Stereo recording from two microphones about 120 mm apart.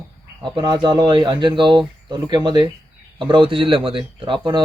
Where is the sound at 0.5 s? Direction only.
40° right (ahead or behind).